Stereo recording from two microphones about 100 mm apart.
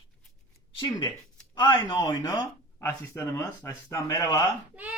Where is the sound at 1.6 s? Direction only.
55° left (ahead or behind).